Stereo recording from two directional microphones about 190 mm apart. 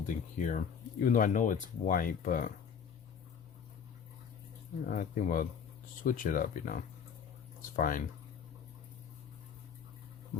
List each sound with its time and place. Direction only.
0.0 s speech: 45° left (ahead or behind)
4.9 s speech: 45° left (ahead or behind)